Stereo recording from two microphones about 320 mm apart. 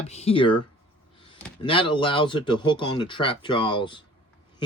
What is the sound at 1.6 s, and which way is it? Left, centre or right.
Speech, centre.